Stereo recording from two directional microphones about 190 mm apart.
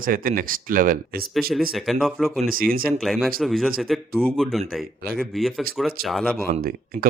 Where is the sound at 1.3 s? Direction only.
Centre (ahead or behind).